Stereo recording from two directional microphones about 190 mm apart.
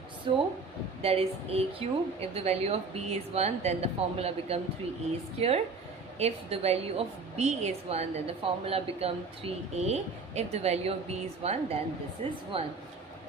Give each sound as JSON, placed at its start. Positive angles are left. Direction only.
{"t": 0.3, "sound": "a woman's voice", "side_deg": -25}